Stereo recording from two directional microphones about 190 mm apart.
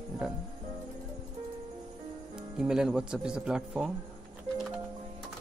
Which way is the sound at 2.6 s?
5° right (ahead or behind).